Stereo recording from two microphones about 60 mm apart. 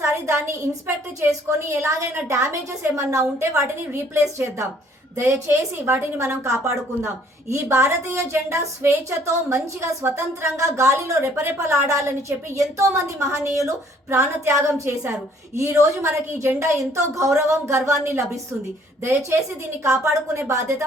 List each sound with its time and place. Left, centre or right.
0.0 s a woman's voice: right
19.8 s a woman's voice: right